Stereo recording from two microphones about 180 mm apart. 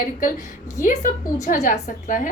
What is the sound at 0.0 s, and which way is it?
A woman's voice, 50° left (ahead or behind).